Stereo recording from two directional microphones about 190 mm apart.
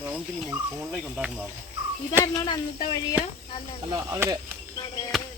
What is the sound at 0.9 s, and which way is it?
Speech, 5° right (ahead or behind).